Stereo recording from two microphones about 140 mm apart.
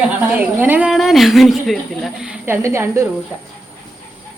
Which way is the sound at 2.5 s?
20° right (ahead or behind).